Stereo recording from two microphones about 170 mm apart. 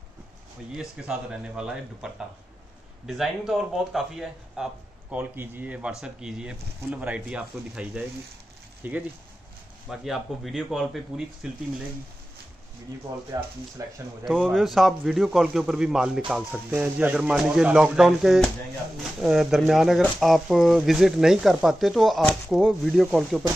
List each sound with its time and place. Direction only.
0.7 s speech: 5° right (ahead or behind)
13.8 s speech: 20° right (ahead or behind)
14.2 s speech: 5° left (ahead or behind)